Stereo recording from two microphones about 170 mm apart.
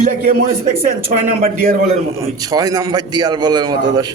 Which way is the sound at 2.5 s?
20° right (ahead or behind).